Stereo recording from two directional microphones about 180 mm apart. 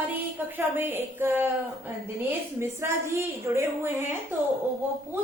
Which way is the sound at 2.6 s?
15° right (ahead or behind).